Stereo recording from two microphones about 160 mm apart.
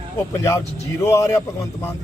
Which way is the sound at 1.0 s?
20° left (ahead or behind).